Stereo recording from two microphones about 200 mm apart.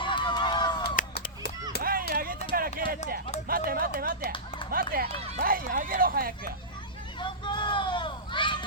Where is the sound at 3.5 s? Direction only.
45° right (ahead or behind).